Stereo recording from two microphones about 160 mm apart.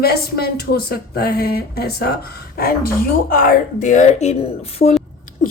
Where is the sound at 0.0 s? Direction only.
80° left.